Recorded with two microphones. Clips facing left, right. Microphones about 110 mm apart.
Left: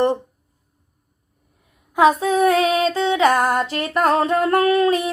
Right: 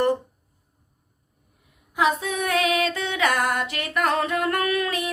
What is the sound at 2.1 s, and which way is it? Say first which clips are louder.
Female singing: left 9 dB; 35° left (ahead or behind).